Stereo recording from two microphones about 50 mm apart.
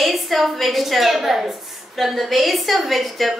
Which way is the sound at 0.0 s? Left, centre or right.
Centre.